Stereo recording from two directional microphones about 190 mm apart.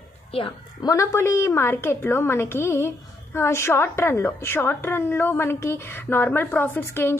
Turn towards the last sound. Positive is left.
turn(degrees=10)  # may be behind; listen again after turning